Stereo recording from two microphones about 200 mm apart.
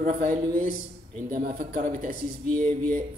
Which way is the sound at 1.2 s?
50° right (ahead or behind).